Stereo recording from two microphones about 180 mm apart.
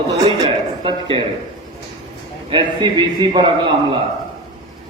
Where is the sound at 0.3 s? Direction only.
30° right (ahead or behind).